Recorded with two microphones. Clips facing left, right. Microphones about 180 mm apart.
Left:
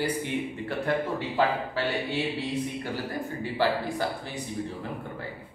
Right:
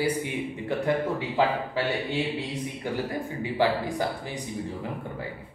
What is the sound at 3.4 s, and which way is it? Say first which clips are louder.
A man's voice: right 2 dB; 15° right (ahead or behind).